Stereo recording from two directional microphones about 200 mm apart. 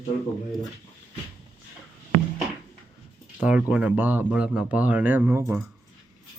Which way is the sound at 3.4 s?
5° right (ahead or behind).